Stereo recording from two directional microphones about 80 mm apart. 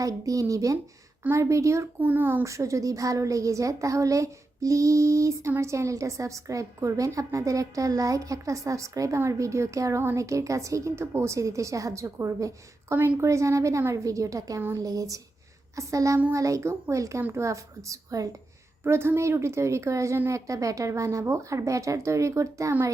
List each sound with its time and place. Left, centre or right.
0.0 s a woman's voice: right
2.0 s speech: right
2.4 s a woman's voice: right
18.9 s a woman's voice: right